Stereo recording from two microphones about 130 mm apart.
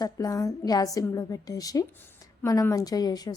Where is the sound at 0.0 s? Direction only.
25° left (ahead or behind).